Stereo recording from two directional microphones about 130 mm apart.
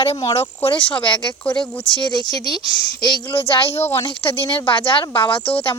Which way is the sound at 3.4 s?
45° left (ahead or behind).